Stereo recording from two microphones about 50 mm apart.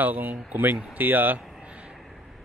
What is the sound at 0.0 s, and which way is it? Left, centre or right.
Speech, right.